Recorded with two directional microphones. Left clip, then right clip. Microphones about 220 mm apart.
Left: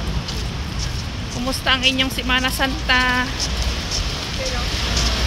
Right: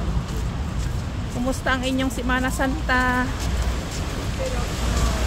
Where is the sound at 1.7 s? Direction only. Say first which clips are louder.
Left 8 dB; 20° right (ahead or behind).